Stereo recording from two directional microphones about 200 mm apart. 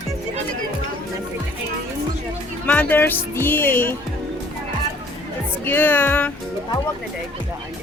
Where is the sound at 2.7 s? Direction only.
10° left (ahead or behind).